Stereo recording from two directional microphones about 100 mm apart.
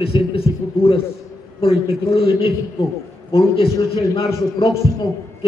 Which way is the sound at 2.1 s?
65° left (ahead or behind).